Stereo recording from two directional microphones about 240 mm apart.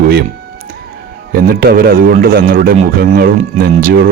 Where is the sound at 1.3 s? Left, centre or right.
Right.